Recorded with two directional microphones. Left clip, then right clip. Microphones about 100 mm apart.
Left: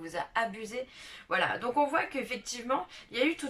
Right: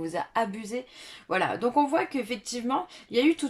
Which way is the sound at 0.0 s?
50° right (ahead or behind).